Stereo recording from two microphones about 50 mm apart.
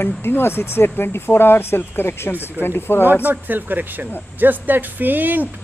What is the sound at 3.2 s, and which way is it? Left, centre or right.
Speech, right.